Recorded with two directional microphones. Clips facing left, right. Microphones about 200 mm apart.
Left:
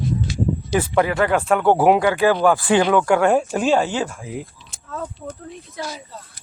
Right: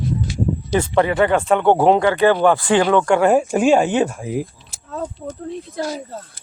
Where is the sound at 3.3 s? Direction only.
10° right (ahead or behind).